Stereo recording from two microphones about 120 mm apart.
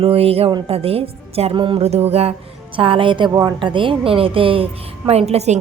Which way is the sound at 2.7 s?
45° right (ahead or behind).